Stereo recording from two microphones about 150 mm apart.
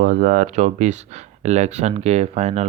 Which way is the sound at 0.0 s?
60° right (ahead or behind).